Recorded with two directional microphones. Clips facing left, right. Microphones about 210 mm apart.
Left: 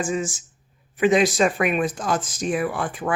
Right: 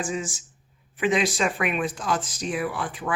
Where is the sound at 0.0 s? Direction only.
45° left (ahead or behind).